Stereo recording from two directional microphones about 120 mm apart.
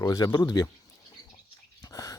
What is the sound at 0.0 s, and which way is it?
Speech, 30° left (ahead or behind).